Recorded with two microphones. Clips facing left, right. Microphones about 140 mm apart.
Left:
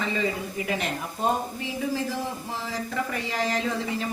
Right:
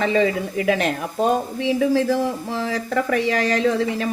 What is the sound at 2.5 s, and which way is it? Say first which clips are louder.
Speech: right 8 dB; 70° right (ahead or behind).